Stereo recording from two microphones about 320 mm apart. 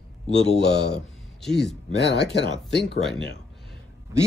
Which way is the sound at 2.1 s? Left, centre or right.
Left.